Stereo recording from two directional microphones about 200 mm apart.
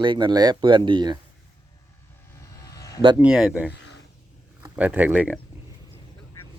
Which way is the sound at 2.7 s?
15° left (ahead or behind).